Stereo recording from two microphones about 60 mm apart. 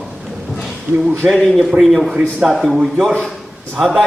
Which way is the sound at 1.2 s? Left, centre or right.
Centre.